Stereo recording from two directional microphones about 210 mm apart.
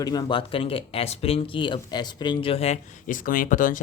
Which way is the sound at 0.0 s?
20° left (ahead or behind).